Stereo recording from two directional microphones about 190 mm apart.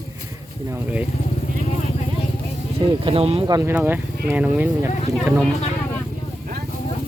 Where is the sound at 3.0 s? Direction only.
30° right (ahead or behind).